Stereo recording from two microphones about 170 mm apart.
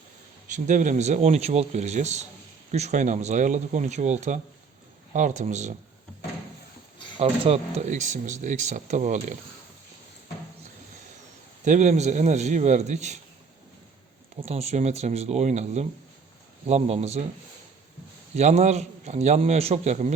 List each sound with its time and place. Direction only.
0.4 s speech: 50° right (ahead or behind)
7.2 s speech: 35° right (ahead or behind)
11.6 s speech: 45° right (ahead or behind)
14.4 s a man's voice: 40° right (ahead or behind)
18.3 s a man's voice: 40° right (ahead or behind)